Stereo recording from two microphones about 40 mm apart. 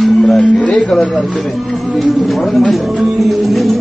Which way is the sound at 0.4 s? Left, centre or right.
Left.